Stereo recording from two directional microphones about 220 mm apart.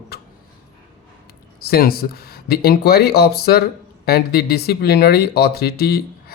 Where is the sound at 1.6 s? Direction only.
45° left (ahead or behind).